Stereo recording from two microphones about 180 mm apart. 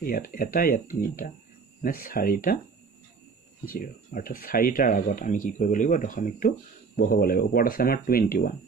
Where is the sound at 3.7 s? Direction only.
55° left (ahead or behind).